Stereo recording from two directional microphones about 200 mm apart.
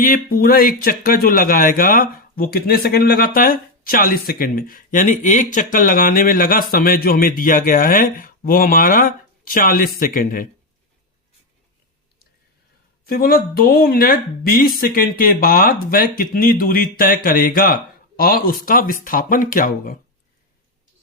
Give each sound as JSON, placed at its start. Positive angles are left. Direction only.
{"t": 0.0, "sound": "speech", "side_deg": 45}
{"t": 13.1, "sound": "speech", "side_deg": 50}